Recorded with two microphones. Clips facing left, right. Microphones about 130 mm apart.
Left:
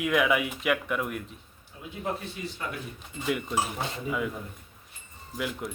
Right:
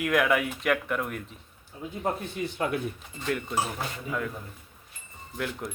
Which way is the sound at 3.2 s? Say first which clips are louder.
Left 1 dB; 10° left (ahead or behind).